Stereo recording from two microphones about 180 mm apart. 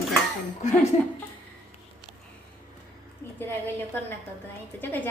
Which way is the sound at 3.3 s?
10° left (ahead or behind).